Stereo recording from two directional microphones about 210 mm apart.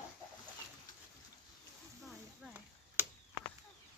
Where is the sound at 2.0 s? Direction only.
5° right (ahead or behind).